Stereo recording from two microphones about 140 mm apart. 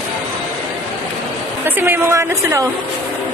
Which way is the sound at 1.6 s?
15° right (ahead or behind).